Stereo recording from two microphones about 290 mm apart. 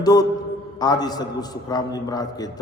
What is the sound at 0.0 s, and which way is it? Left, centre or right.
A man's voice, centre.